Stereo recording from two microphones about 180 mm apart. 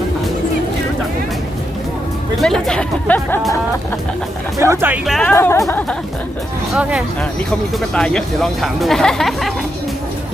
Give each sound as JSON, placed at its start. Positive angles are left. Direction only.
{"t": 2.4, "sound": "speech", "side_deg": 0}
{"t": 4.5, "sound": "speech", "side_deg": -15}
{"t": 5.0, "sound": "speech", "side_deg": 0}
{"t": 5.3, "sound": "speech", "side_deg": 15}
{"t": 7.9, "sound": "speech", "side_deg": 5}